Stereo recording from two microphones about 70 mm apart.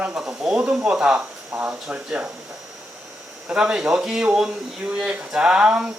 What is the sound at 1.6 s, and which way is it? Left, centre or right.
Speech, right.